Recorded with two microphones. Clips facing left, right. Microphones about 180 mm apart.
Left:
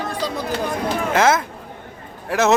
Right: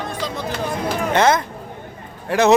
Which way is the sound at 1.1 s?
Centre (ahead or behind).